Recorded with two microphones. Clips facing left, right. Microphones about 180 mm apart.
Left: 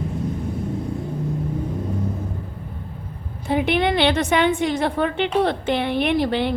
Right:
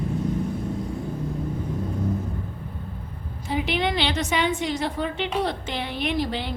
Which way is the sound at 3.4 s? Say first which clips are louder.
Left 5 dB; 55° left (ahead or behind).